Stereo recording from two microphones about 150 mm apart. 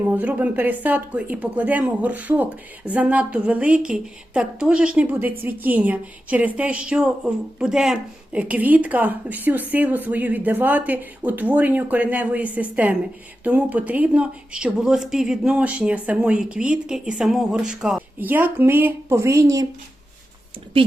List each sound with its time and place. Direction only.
0.1 s speech: 10° right (ahead or behind)
20.7 s speech: 35° right (ahead or behind)